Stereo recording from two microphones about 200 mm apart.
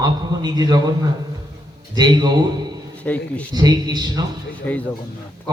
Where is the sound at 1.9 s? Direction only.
20° right (ahead or behind).